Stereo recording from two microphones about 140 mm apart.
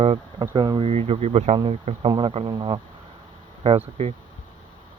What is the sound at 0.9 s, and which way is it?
Speech, 45° right (ahead or behind).